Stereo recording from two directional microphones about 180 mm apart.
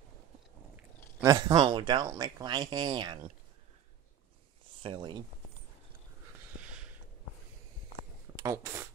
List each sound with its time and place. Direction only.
1.2 s speech: 20° right (ahead or behind)
4.8 s speech: 25° right (ahead or behind)
8.4 s speech: 15° right (ahead or behind)